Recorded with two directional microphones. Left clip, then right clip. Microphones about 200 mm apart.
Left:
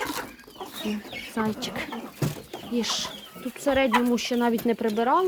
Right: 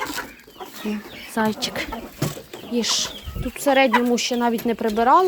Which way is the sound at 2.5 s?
15° right (ahead or behind).